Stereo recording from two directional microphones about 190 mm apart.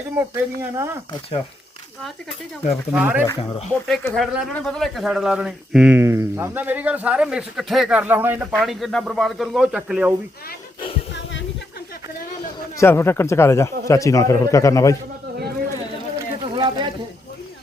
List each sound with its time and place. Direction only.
0.2 s speech: 15° right (ahead or behind)
2.9 s speech: 10° right (ahead or behind)
3.4 s speech: 25° left (ahead or behind)
3.7 s speech: 5° left (ahead or behind)
11.1 s a sound: 65° left (ahead or behind)
12.7 s a man's voice: 15° left (ahead or behind)
16.1 s a sound: 25° right (ahead or behind)